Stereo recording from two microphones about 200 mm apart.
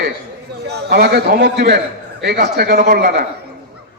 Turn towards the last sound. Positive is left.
turn(degrees=-50)  # may be behind; listen again after turning